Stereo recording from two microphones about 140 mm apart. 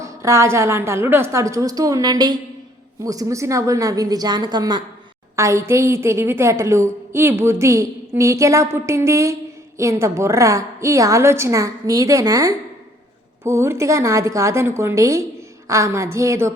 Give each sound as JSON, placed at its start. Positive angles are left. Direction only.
{"t": 0.0, "sound": "a woman's voice", "side_deg": -20}